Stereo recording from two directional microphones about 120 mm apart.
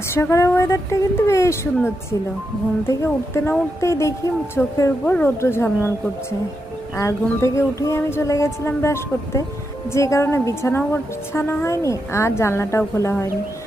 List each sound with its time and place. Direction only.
0.1 s a woman's voice: 25° left (ahead or behind)
6.9 s a woman's voice: 25° left (ahead or behind)